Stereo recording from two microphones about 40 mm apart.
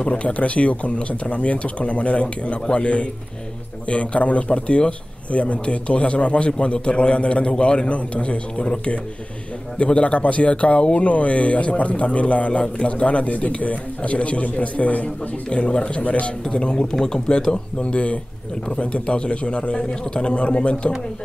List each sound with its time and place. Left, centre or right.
0.0 s a man's voice: left
16.5 s a man's voice: left